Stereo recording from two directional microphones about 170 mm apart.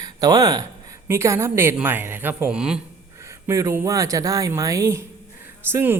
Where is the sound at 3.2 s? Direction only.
15° right (ahead or behind).